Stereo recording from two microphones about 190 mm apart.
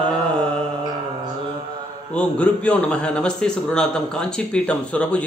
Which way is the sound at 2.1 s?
5° left (ahead or behind).